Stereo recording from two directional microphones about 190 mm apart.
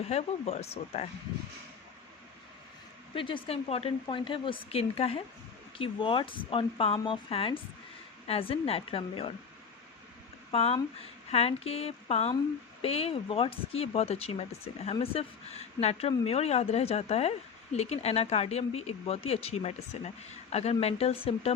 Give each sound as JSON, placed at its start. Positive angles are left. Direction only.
{"t": 0.1, "sound": "speech", "side_deg": 35}
{"t": 3.2, "sound": "speech", "side_deg": 25}
{"t": 10.5, "sound": "speech", "side_deg": 30}